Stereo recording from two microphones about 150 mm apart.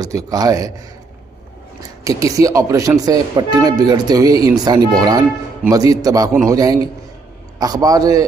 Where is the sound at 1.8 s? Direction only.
25° right (ahead or behind).